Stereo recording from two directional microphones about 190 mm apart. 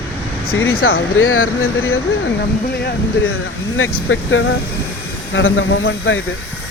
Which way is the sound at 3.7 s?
90° left.